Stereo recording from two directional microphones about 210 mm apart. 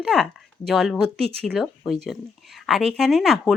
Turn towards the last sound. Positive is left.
turn(degrees=0)  # may be behind; listen again after turning